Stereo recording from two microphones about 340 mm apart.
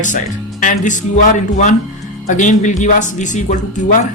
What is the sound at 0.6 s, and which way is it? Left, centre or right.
Speech, left.